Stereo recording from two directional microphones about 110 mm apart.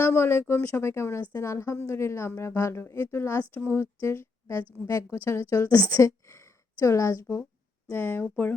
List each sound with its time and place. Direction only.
0.0 s speech: 20° left (ahead or behind)